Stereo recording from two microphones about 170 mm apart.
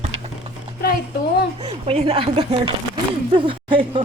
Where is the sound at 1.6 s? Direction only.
35° right (ahead or behind).